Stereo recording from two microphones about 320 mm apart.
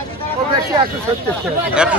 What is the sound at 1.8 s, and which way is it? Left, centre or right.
Speech, centre.